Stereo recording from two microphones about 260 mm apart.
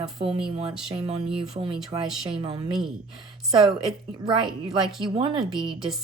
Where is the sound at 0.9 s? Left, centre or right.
Right.